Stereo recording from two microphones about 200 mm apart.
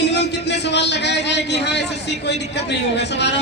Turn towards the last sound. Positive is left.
turn(degrees=60)  # may be behind; listen again after turning